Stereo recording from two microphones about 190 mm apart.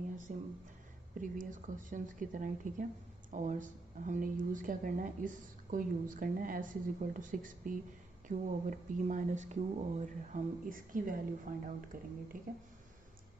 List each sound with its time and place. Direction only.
0.3 s speech: 40° right (ahead or behind)